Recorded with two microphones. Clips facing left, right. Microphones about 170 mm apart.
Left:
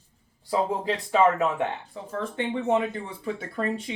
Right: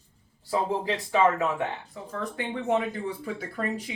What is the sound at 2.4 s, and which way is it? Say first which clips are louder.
Speech: left 2 dB; 25° left (ahead or behind).